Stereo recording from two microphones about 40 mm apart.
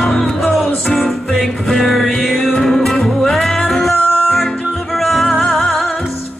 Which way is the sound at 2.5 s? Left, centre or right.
Centre.